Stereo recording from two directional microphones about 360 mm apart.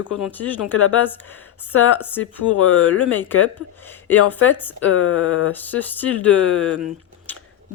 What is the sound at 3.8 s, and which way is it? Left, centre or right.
Speech, centre.